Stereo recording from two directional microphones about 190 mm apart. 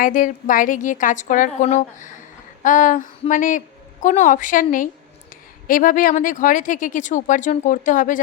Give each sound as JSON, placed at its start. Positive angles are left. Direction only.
{"t": 0.0, "sound": "speech", "side_deg": 45}